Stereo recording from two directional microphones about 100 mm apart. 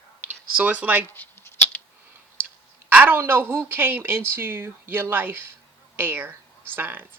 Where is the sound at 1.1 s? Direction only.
20° left (ahead or behind).